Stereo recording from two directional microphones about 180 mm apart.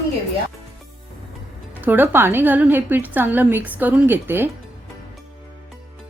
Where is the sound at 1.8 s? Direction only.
10° right (ahead or behind).